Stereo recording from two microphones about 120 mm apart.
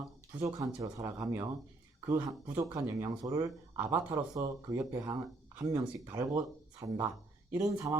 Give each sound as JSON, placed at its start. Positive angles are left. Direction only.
{"t": 0.3, "sound": "speech", "side_deg": -25}